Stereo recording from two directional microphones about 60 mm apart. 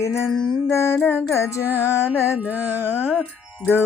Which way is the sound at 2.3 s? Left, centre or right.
Right.